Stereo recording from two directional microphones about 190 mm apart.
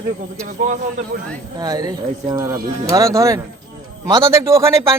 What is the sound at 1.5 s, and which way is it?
A man's voice, 20° right (ahead or behind).